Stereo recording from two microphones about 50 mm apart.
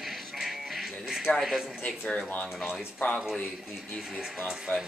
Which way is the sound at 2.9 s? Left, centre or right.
Left.